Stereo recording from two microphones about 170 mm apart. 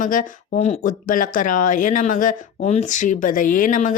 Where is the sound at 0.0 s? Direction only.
50° left (ahead or behind).